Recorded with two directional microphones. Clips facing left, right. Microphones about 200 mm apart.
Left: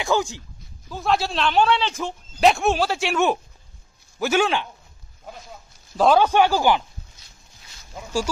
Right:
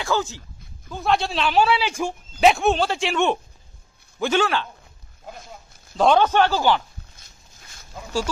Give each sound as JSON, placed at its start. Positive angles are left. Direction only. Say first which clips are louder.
{"t": 0.0, "sound": "a man's voice", "louder": "left 2 dB", "side_deg": 15}
{"t": 0.8, "sound": "a man's voice", "louder": "even", "side_deg": 5}
{"t": 5.9, "sound": "a man's voice", "louder": "left 1 dB", "side_deg": 5}